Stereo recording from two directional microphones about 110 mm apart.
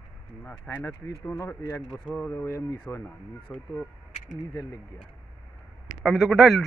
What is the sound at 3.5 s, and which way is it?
Speech, 15° left (ahead or behind).